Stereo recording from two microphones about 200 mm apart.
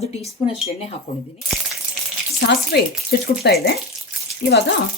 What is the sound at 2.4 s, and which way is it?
Speech, 55° left (ahead or behind).